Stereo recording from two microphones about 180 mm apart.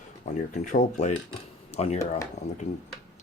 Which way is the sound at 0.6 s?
45° left (ahead or behind).